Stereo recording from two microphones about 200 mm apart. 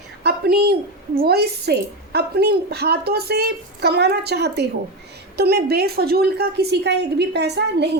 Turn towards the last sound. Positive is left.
turn(degrees=-55)  # may be behind; listen again after turning